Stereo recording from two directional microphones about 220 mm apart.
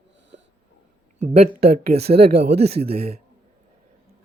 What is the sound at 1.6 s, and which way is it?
Speech, 45° right (ahead or behind).